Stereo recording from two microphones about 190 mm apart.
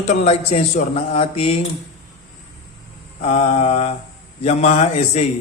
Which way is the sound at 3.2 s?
40° left (ahead or behind).